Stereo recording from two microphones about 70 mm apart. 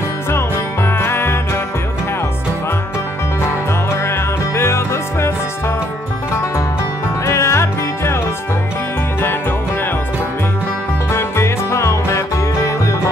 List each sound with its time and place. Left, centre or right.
0.8 s music: left
3.9 s music: left
7.2 s music: left
11.1 s music: left